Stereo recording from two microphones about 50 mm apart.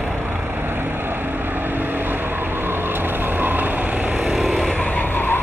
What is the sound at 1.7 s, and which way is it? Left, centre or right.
Vehicle, right.